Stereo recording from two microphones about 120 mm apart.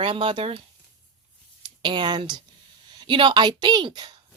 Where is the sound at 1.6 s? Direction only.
40° right (ahead or behind).